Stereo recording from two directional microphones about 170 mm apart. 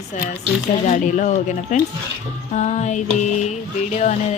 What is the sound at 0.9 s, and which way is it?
Music, 45° left (ahead or behind).